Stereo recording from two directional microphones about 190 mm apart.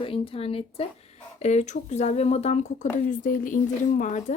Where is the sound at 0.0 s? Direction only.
30° left (ahead or behind).